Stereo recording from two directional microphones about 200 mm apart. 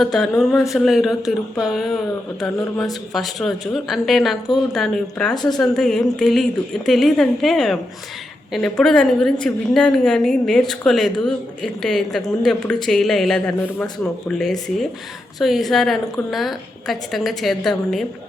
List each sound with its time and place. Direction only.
0.0 s a woman's voice: centre (ahead or behind)
5.3 s speech: 20° left (ahead or behind)
5.5 s a woman's voice: centre (ahead or behind)